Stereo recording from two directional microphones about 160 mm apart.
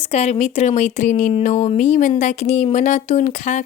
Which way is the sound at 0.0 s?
45° left (ahead or behind).